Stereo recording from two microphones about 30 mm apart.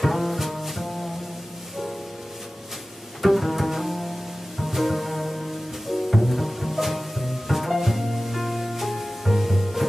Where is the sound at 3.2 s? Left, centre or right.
Centre.